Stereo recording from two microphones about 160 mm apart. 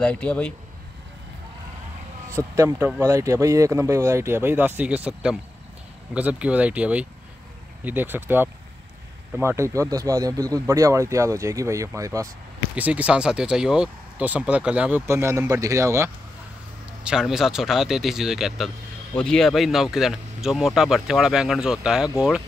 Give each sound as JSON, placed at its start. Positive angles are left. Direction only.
{"t": 0.0, "sound": "a man's voice", "side_deg": 5}
{"t": 2.3, "sound": "speech", "side_deg": -20}
{"t": 12.7, "sound": "speech", "side_deg": -10}
{"t": 17.0, "sound": "speech", "side_deg": -5}